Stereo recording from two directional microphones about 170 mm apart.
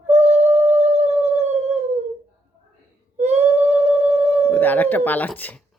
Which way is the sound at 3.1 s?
40° right (ahead or behind).